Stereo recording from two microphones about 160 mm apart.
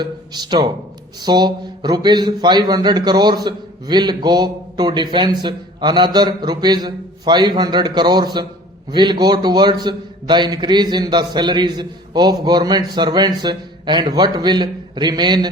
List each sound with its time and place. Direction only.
0.0 s a man's voice: 25° right (ahead or behind)